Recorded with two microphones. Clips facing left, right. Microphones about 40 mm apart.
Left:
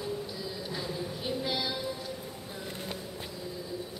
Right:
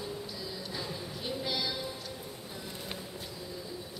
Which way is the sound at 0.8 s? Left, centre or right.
Centre.